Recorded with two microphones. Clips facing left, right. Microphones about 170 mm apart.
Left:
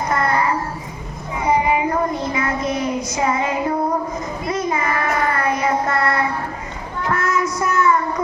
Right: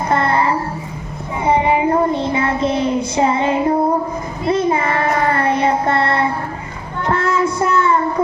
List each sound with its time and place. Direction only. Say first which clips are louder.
0.1 s child singing: right 3 dB; 30° right (ahead or behind)